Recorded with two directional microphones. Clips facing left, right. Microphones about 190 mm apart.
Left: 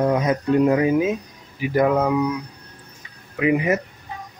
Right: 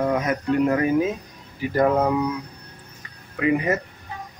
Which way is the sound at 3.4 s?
15° left (ahead or behind).